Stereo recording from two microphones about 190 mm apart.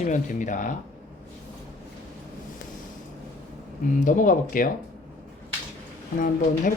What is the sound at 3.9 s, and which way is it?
Speech, 45° left (ahead or behind).